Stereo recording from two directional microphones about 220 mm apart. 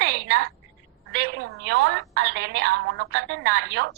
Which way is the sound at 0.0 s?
50° right (ahead or behind).